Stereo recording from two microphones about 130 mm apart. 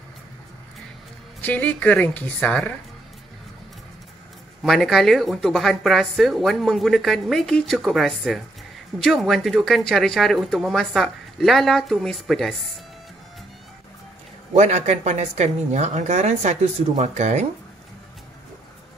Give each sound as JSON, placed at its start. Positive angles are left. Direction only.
{"t": 1.4, "sound": "a woman's voice", "side_deg": 10}
{"t": 4.6, "sound": "speech", "side_deg": 0}
{"t": 14.5, "sound": "speech", "side_deg": -60}